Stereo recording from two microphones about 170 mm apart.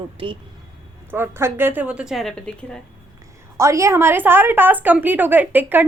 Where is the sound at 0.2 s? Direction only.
30° right (ahead or behind).